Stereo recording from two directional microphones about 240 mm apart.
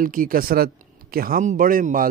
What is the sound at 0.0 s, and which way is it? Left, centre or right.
Speech, right.